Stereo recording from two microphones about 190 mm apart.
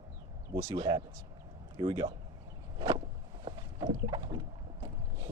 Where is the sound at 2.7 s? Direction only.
25° right (ahead or behind).